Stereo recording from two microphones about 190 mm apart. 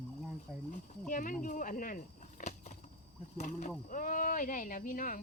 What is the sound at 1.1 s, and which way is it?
Speech, 45° left (ahead or behind).